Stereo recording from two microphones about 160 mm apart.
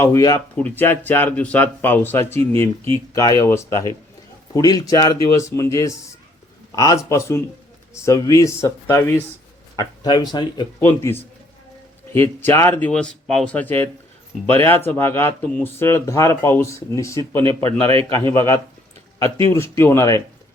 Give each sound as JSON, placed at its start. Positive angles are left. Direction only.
{"t": 0.0, "sound": "speech", "side_deg": 20}
{"t": 0.5, "sound": "speech", "side_deg": 10}
{"t": 12.4, "sound": "speech", "side_deg": 15}
{"t": 17.4, "sound": "a man's voice", "side_deg": -35}
{"t": 18.3, "sound": "speech", "side_deg": 15}